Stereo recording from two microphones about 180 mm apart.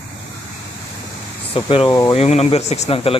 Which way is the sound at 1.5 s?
30° left (ahead or behind).